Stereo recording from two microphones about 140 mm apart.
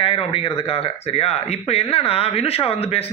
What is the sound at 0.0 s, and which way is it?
Speech, 45° left (ahead or behind).